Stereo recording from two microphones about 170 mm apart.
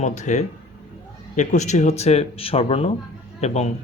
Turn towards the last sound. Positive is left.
turn(degrees=40)  # may be behind; listen again after turning